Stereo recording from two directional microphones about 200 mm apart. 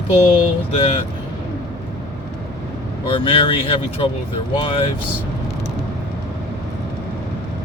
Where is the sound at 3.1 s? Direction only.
25° left (ahead or behind).